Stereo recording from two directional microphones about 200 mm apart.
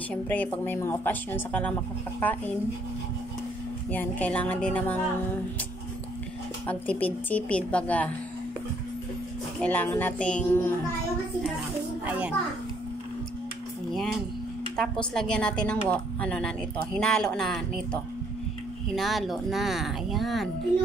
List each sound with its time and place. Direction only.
0.1 s a woman's voice: 10° left (ahead or behind)
3.9 s a woman's voice: 10° left (ahead or behind)
6.7 s a woman's voice: 5° left (ahead or behind)
9.6 s a woman's voice: 10° left (ahead or behind)
12.1 s a child's voice: 5° right (ahead or behind)
14.8 s a woman's voice: 5° left (ahead or behind)
18.9 s a woman's voice: centre (ahead or behind)